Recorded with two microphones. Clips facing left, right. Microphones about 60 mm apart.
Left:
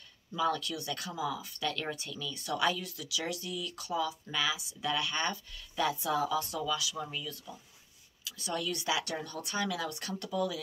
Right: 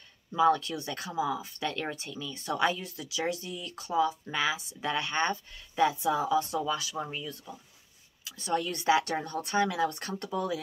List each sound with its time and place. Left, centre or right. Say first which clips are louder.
0.3 s speech: right 7 dB; right